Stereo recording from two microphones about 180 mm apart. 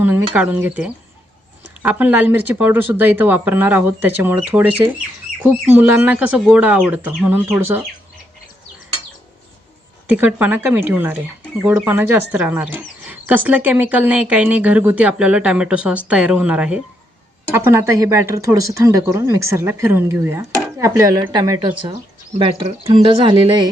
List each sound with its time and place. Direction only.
0.0 s speech: 10° right (ahead or behind)
10.1 s speech: 10° right (ahead or behind); by 23.6 s 25° right (ahead or behind)